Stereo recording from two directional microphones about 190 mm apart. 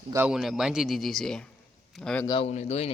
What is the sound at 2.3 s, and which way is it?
Speech, 30° left (ahead or behind).